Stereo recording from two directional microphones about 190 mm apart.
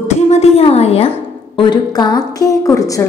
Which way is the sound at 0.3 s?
35° left (ahead or behind).